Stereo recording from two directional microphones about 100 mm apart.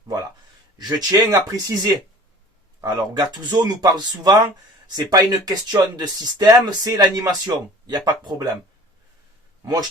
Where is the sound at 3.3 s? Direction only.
40° right (ahead or behind).